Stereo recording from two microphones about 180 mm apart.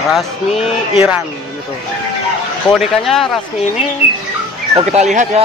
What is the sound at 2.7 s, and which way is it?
Speech, centre (ahead or behind).